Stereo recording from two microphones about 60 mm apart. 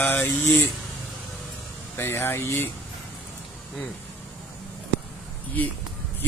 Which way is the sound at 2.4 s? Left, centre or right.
Left.